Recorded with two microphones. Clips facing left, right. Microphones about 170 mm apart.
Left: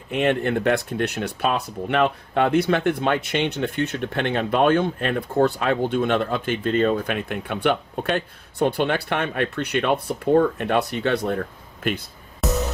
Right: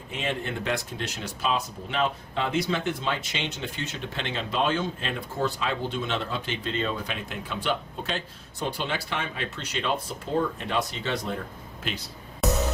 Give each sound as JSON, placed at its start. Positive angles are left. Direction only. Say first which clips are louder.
{"t": 0.1, "sound": "speech", "louder": "left 10 dB", "side_deg": 60}
{"t": 12.4, "sound": "music", "louder": "left 2 dB", "side_deg": 0}